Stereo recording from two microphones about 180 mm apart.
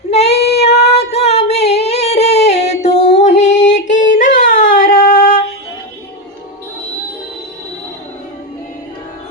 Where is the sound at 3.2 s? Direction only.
40° left (ahead or behind).